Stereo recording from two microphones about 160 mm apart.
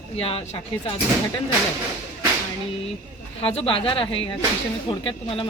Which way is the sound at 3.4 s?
35° left (ahead or behind).